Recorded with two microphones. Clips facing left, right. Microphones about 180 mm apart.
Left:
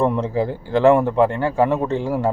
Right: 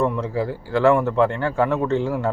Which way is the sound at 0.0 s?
20° left (ahead or behind).